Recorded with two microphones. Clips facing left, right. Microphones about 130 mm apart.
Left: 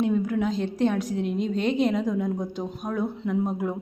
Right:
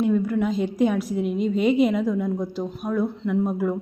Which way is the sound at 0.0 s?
Centre (ahead or behind).